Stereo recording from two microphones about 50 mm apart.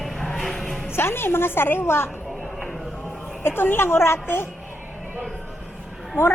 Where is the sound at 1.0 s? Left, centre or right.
Left.